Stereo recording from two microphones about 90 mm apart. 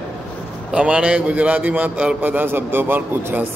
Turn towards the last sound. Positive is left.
turn(degrees=-20)  # may be behind; listen again after turning